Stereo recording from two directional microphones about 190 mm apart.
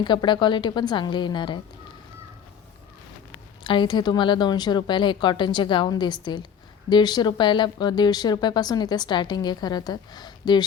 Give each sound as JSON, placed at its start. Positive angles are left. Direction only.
{"t": 0.0, "sound": "speech", "side_deg": 25}
{"t": 3.6, "sound": "speech", "side_deg": 25}